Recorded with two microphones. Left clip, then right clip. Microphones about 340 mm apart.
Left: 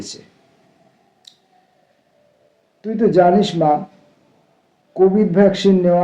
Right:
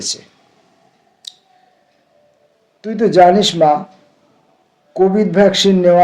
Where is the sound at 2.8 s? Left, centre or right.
Right.